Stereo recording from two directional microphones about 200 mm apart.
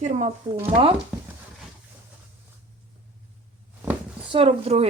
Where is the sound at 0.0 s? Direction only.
35° right (ahead or behind).